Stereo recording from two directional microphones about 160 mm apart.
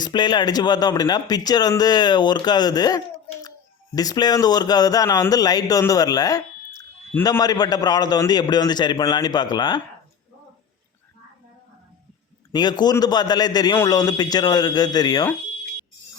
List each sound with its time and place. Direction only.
0.0 s speech: 25° left (ahead or behind)
12.5 s speech: 25° left (ahead or behind)